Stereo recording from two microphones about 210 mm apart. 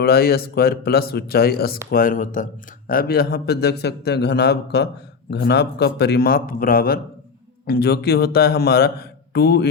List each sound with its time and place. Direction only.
0.0 s speech: 50° left (ahead or behind)